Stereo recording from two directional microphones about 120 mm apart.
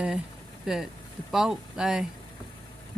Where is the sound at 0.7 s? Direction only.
5° right (ahead or behind).